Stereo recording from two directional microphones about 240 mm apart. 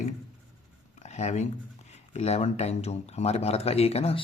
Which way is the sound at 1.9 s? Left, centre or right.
Left.